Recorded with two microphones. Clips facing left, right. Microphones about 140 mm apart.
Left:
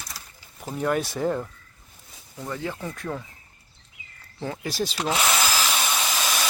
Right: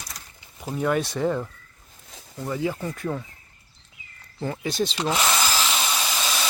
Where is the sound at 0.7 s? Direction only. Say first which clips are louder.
Right 1 dB; centre (ahead or behind).